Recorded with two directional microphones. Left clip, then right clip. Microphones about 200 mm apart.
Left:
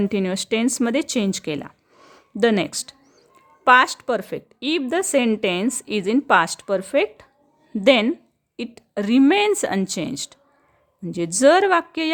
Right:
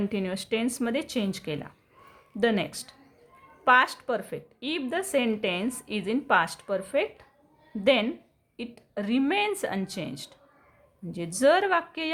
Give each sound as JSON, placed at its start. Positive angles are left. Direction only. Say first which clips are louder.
{"t": 0.0, "sound": "a woman's voice", "louder": "left 8 dB", "side_deg": 40}